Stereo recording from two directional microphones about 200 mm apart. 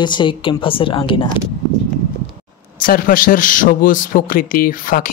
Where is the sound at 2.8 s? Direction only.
45° left (ahead or behind).